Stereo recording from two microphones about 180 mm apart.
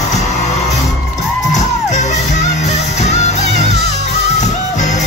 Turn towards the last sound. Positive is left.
turn(degrees=40)  # may be behind; listen again after turning